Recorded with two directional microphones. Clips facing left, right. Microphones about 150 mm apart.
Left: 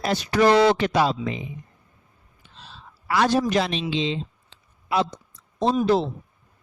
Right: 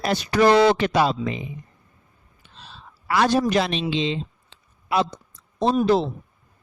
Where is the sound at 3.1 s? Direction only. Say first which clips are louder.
Right 1 dB; 60° right (ahead or behind).